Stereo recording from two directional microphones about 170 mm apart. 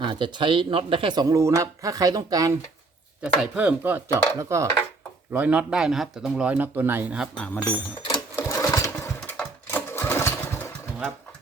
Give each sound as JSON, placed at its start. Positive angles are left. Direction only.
{"t": 0.0, "sound": "speech", "side_deg": -25}
{"t": 3.4, "sound": "speech", "side_deg": -5}
{"t": 7.3, "sound": "speech", "side_deg": 5}
{"t": 7.6, "sound": "speech", "side_deg": 25}
{"t": 8.4, "sound": "sewing machine", "side_deg": 15}